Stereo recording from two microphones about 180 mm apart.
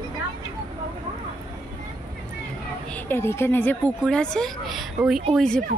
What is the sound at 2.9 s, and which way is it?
Speech, 10° left (ahead or behind).